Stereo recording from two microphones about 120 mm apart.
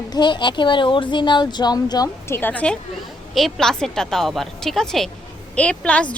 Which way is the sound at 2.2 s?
20° left (ahead or behind).